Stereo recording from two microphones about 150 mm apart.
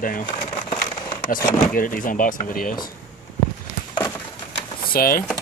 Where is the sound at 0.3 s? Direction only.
35° left (ahead or behind).